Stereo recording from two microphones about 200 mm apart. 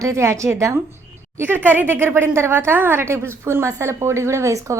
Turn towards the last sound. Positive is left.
turn(degrees=-15)  # may be behind; listen again after turning